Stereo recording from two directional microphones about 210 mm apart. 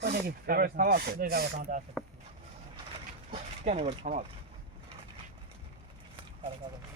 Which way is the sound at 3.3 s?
30° right (ahead or behind).